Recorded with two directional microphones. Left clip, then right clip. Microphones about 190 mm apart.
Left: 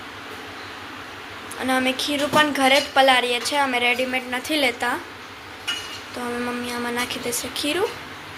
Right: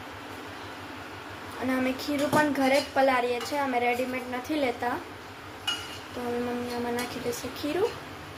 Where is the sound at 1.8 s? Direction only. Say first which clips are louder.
Left 6 dB; 5° right (ahead or behind).